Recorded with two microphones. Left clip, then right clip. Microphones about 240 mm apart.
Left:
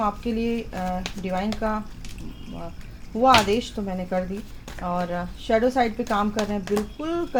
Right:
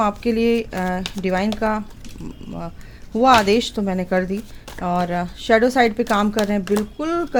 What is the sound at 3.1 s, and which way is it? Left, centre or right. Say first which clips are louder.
Speech: right 4 dB; right.